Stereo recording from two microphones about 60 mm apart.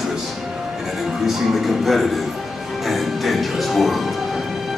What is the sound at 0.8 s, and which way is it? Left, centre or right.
Music, centre.